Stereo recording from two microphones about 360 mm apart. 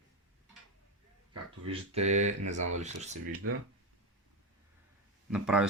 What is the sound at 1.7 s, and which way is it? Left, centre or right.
Speech, centre.